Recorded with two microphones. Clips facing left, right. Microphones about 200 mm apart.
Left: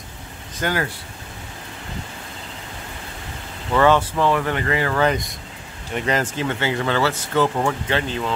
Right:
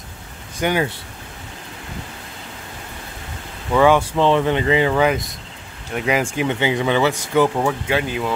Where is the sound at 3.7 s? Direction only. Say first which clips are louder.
Right 2 dB; 10° right (ahead or behind).